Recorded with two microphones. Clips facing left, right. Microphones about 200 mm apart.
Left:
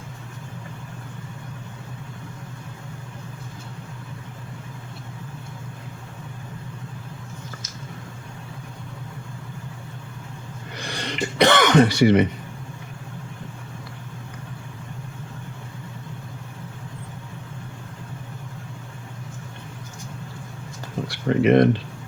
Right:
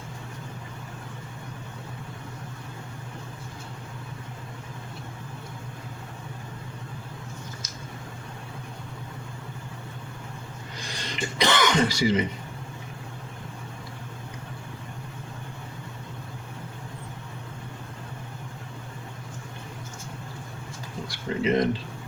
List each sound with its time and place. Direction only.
10.8 s throat clearing: 65° left (ahead or behind)
21.1 s speech: 65° left (ahead or behind)